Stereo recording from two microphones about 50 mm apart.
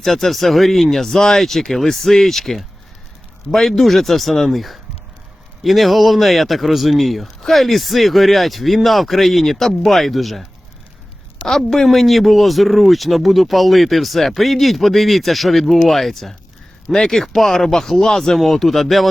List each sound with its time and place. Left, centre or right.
0.0 s speech: centre
11.4 s speech: centre